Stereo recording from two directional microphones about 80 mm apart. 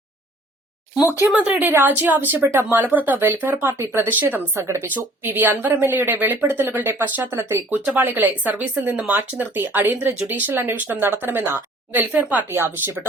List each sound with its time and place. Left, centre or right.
1.3 s speech: right
7.9 s speech: right
12.5 s speech: right